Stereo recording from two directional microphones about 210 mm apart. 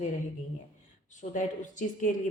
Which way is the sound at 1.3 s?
35° left (ahead or behind).